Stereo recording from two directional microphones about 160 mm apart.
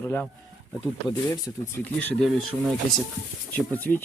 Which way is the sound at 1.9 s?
5° left (ahead or behind).